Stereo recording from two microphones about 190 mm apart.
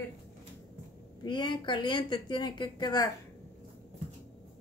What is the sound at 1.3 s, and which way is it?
A woman's voice, 25° left (ahead or behind).